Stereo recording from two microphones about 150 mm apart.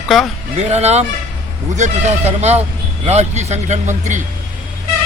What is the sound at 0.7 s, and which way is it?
Speech, 45° right (ahead or behind).